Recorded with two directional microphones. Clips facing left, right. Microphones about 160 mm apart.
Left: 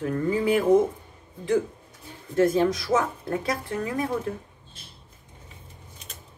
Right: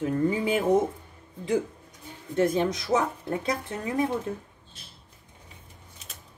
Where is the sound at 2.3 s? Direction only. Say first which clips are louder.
Left 3 dB; 25° right (ahead or behind).